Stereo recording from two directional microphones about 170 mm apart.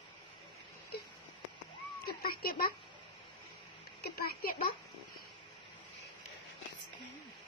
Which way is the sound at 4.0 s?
65° left (ahead or behind).